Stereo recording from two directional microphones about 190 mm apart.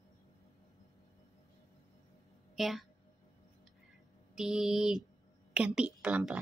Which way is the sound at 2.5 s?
Centre (ahead or behind).